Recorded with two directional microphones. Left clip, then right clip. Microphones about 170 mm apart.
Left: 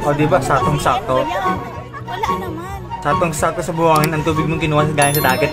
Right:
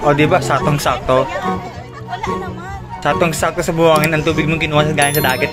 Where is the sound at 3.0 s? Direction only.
20° right (ahead or behind).